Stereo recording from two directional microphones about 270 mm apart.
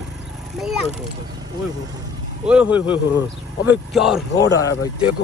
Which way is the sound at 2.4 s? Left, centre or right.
Centre.